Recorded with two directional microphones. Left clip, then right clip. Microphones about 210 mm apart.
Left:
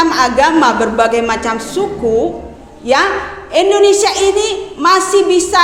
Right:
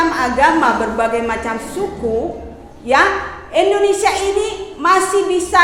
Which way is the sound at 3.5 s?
35° left (ahead or behind).